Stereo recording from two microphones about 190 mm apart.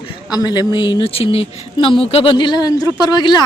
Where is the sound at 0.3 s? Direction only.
20° left (ahead or behind).